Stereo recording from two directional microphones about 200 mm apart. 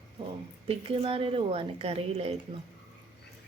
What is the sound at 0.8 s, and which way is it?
A woman's voice, 25° right (ahead or behind).